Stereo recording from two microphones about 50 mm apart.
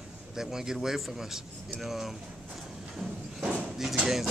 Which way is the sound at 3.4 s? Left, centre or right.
Right.